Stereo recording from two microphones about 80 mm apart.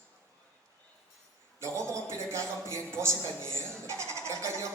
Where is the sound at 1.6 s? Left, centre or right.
Right.